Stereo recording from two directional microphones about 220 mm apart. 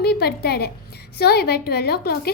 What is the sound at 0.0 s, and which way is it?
A woman's voice, 45° left (ahead or behind).